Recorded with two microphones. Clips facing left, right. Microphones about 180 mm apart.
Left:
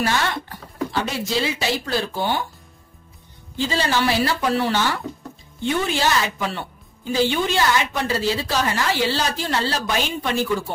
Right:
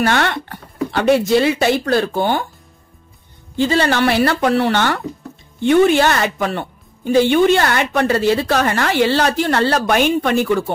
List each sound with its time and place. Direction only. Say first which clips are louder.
0.0 s a woman's voice: right 5 dB; 60° right (ahead or behind)
3.5 s a woman's voice: right 6 dB; 60° right (ahead or behind)